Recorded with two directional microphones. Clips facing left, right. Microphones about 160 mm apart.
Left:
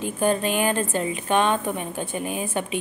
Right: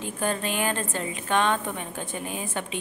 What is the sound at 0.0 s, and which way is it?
A woman's voice, 15° left (ahead or behind).